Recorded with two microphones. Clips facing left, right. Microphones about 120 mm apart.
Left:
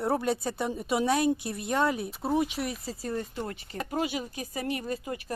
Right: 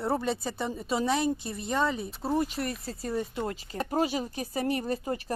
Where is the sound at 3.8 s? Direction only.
40° right (ahead or behind).